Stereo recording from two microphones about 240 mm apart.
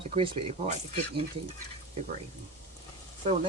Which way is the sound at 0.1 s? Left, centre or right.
Right.